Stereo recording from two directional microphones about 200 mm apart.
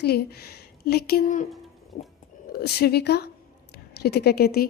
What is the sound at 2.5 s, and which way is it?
A woman's voice, 50° left (ahead or behind).